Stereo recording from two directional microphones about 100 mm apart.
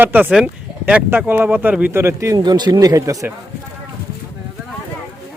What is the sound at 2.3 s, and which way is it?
Speech, 45° right (ahead or behind).